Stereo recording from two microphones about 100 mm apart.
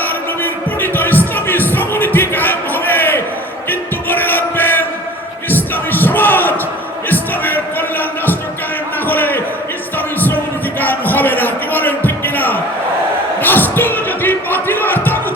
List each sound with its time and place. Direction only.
0.0 s music: 20° left (ahead or behind)
5.5 s a sound: 20° left (ahead or behind)
13.4 s music: 20° left (ahead or behind)